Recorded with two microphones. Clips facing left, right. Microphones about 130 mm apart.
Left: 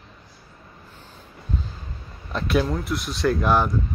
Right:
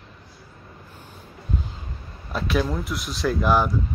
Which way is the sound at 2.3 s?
Centre (ahead or behind).